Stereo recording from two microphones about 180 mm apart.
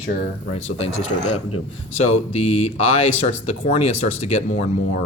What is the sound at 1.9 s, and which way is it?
Speech, 35° left (ahead or behind).